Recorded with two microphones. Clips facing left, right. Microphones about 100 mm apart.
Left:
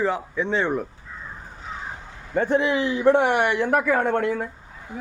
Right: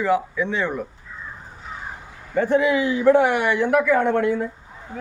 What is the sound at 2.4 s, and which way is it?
Speech, 30° left (ahead or behind).